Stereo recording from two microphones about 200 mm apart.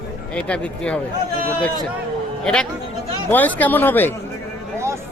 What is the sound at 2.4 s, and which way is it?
A man's voice, 5° left (ahead or behind).